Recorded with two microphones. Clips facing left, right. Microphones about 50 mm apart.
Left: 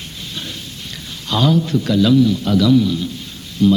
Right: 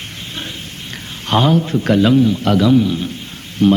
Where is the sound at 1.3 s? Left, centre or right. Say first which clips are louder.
Right 2 dB; right.